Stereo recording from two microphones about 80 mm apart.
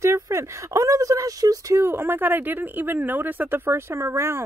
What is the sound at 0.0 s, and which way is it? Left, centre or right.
Speech, right.